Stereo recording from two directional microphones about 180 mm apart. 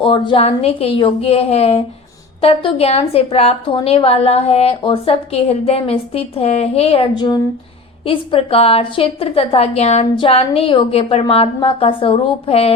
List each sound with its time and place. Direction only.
0.0 s a woman's voice: 30° left (ahead or behind)